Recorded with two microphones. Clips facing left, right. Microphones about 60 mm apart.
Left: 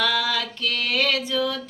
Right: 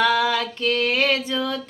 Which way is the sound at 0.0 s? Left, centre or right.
Right.